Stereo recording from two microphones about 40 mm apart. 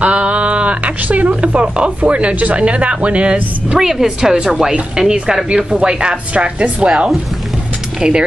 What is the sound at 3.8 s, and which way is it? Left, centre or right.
Speech, centre.